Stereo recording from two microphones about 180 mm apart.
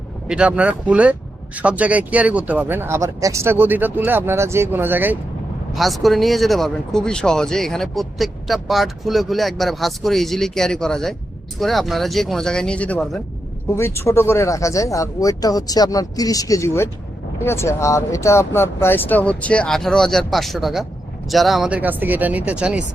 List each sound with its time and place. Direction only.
0.3 s speech: 5° right (ahead or behind)
5.7 s speech: centre (ahead or behind)